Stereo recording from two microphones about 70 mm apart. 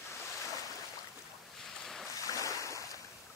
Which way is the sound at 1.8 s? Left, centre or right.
Centre.